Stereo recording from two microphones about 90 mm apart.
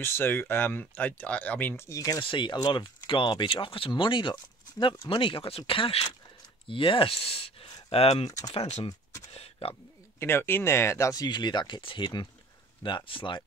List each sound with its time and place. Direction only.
0.0 s speech: 25° left (ahead or behind)
1.9 s speech: 40° left (ahead or behind)
2.2 s speech: 65° left (ahead or behind); by 6.0 s 85° left
6.7 s speech: 75° left (ahead or behind); by 8.3 s 90° left
8.3 s speech: 40° left (ahead or behind)
9.6 s speech: 90° left
10.1 s speech: 25° left (ahead or behind)
11.2 s speech: 55° left (ahead or behind); by 13.4 s 70° left (ahead or behind)